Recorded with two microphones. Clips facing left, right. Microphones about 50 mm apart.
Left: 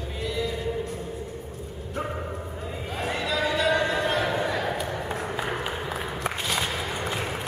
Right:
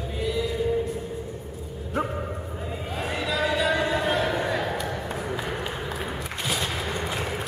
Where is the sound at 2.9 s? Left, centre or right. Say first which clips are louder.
Even; centre.